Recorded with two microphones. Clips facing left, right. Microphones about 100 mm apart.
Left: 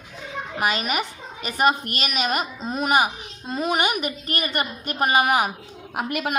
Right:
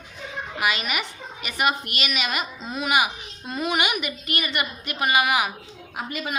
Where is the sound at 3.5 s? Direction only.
35° left (ahead or behind).